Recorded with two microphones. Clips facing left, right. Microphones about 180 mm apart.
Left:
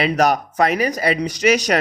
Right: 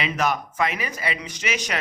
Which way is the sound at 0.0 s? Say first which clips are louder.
Left 7 dB; 40° left (ahead or behind).